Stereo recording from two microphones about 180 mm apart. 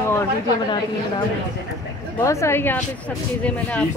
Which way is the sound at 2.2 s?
15° left (ahead or behind).